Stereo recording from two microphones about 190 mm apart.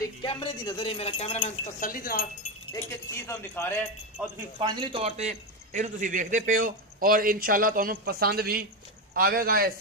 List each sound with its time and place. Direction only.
0.0 s speech: 25° left (ahead or behind); by 2.2 s 50° left (ahead or behind)
2.7 s speech: 15° left (ahead or behind)
4.6 s a man's voice: 25° right (ahead or behind); by 9.7 s 50° right (ahead or behind)